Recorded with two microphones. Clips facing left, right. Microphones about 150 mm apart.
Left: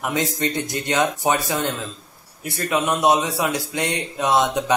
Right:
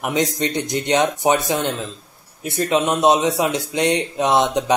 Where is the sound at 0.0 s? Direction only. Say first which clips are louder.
Right 2 dB; 20° right (ahead or behind).